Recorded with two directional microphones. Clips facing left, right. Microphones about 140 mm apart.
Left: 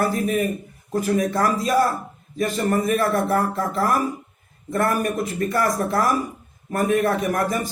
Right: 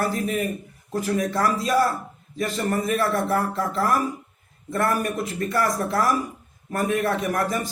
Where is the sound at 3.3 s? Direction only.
50° left (ahead or behind).